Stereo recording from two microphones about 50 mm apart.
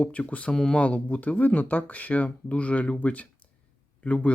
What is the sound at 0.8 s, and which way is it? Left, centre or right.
Speech, left.